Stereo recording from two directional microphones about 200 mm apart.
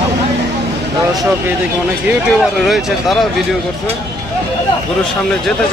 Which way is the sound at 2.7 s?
Centre (ahead or behind).